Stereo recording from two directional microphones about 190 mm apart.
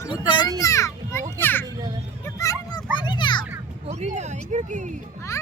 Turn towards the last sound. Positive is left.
turn(degrees=-40)  # may be behind; listen again after turning